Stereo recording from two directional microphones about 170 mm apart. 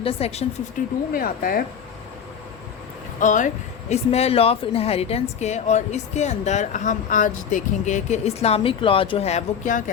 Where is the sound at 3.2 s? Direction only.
50° left (ahead or behind).